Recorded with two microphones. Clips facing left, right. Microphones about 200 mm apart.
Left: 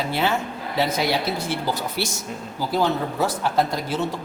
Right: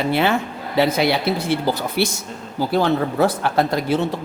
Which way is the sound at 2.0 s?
60° right (ahead or behind).